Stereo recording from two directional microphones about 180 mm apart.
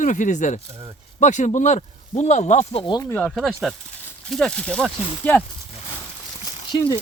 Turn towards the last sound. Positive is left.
turn(degrees=20)  # may be behind; listen again after turning